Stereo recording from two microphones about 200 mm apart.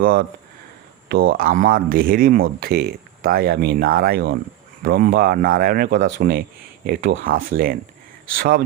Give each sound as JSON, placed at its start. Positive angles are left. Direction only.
{"t": 0.0, "sound": "speech", "side_deg": -45}